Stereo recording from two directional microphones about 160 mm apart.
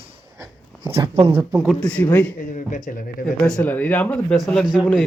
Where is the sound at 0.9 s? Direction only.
35° right (ahead or behind).